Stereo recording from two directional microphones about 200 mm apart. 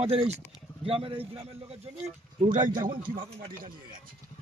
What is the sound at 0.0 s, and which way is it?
Speech, 30° right (ahead or behind).